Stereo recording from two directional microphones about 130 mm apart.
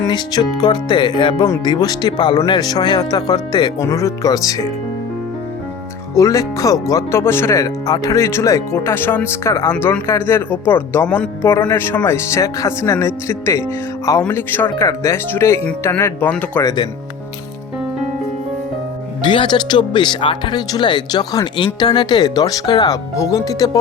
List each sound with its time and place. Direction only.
0.1 s speech: 30° left (ahead or behind)
3.8 s speech: 25° left (ahead or behind)
6.1 s speech: 25° left (ahead or behind)
9.7 s speech: 10° left (ahead or behind)
16.6 s speech: 35° left (ahead or behind)
19.2 s speech: 40° left (ahead or behind)